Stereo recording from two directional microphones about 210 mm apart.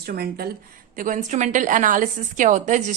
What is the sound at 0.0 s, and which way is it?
A woman's voice, 45° right (ahead or behind).